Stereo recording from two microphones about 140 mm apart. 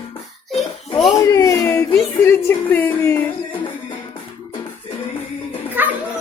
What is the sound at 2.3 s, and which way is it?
Speech, 15° left (ahead or behind).